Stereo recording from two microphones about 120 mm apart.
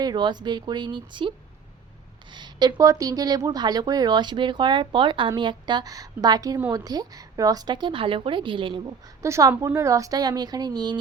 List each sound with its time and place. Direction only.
0.0 s a woman's voice: 35° right (ahead or behind)
2.3 s a woman's voice: 35° right (ahead or behind)
9.2 s a woman's voice: 25° right (ahead or behind)